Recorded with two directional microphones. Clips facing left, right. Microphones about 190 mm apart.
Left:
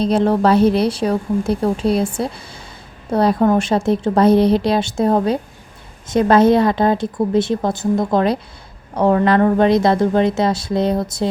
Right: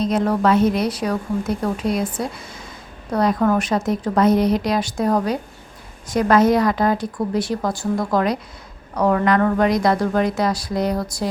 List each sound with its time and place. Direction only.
0.0 s a woman's voice: 30° left (ahead or behind)